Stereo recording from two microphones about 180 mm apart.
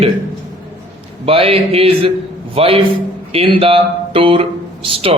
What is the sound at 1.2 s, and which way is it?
A man's voice, 30° right (ahead or behind).